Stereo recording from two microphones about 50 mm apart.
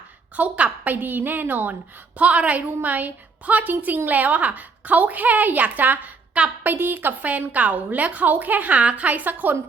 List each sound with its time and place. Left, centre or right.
0.3 s a woman's voice: right
6.7 s a woman's voice: right